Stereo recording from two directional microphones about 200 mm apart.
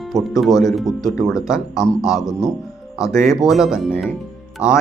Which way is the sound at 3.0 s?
15° left (ahead or behind).